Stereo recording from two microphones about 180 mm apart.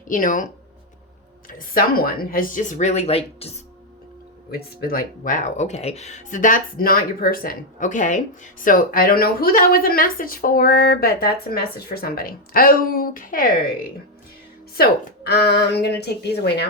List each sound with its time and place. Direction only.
0.1 s speech: 45° left (ahead or behind)
1.5 s speech: 50° left (ahead or behind); by 3.6 s 35° left (ahead or behind)
4.5 s speech: 55° left (ahead or behind)
14.8 s speech: 60° left (ahead or behind)